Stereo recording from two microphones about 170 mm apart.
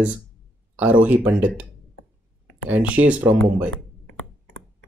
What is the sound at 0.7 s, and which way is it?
Speech, 10° right (ahead or behind).